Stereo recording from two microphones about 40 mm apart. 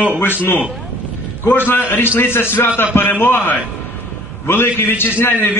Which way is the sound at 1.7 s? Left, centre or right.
Left.